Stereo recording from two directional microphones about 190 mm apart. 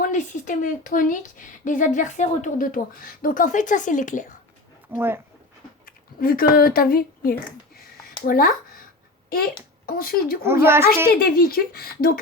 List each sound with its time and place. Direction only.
0.0 s speech: 45° left (ahead or behind)
4.9 s a child's voice: 10° right (ahead or behind)
5.8 s speech: 50° left (ahead or behind)
9.8 s speech: 50° left (ahead or behind)
10.4 s a child's voice: 10° right (ahead or behind)
11.1 s speech: 50° left (ahead or behind)